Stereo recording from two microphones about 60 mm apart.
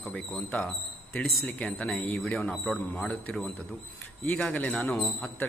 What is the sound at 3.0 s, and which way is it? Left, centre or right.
Speech, left.